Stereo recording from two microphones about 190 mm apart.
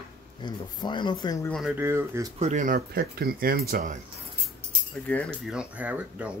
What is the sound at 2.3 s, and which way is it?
Speech, 40° right (ahead or behind).